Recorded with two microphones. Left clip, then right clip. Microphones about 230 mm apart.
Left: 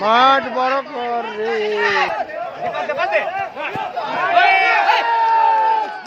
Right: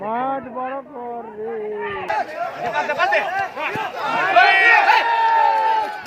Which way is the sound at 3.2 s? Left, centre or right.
Left.